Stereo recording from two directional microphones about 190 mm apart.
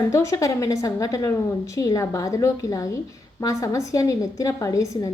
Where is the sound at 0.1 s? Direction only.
15° left (ahead or behind).